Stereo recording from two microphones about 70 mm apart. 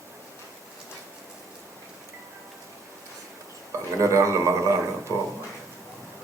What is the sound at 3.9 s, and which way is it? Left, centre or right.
A man's voice, right.